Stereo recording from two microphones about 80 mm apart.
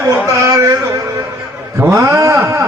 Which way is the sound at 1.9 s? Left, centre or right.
Right.